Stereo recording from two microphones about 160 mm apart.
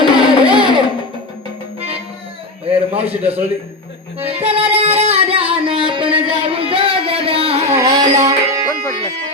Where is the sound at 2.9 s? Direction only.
35° right (ahead or behind).